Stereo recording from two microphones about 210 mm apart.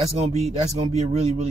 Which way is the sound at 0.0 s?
30° right (ahead or behind).